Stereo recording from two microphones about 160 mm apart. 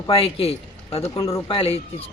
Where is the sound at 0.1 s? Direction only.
35° left (ahead or behind).